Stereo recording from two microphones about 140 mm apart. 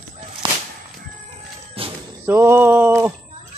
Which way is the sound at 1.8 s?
45° right (ahead or behind).